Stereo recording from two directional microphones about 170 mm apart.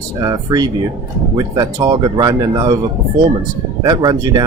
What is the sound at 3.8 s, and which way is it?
Speech, 25° right (ahead or behind).